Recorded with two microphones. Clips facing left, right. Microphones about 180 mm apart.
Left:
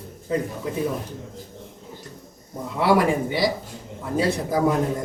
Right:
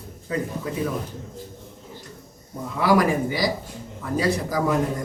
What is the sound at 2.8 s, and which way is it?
Speech, 25° left (ahead or behind).